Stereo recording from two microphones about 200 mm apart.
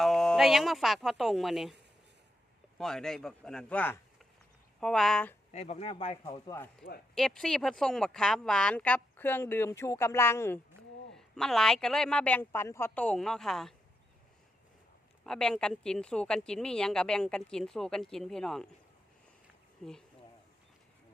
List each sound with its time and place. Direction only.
0.0 s speech: centre (ahead or behind)
2.7 s speech: centre (ahead or behind)
5.5 s speech: 30° left (ahead or behind)
7.2 s speech: 5° left (ahead or behind)
15.2 s speech: 5° left (ahead or behind)
19.8 s speech: 5° left (ahead or behind)